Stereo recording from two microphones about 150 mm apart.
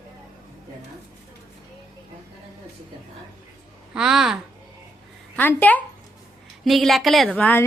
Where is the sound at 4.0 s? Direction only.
5° right (ahead or behind).